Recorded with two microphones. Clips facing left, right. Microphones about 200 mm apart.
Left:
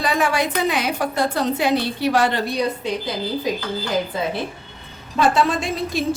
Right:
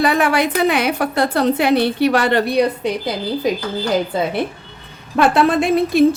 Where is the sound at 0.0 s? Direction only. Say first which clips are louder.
Right 5 dB; 60° right (ahead or behind).